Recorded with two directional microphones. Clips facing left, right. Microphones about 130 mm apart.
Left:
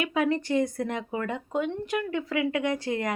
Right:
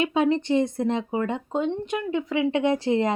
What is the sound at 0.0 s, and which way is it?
Speech, 25° right (ahead or behind).